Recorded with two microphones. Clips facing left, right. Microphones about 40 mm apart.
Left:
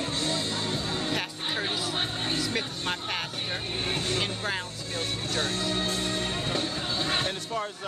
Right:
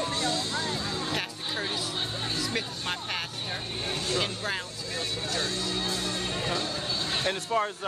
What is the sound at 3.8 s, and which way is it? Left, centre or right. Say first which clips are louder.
Speech: even; left.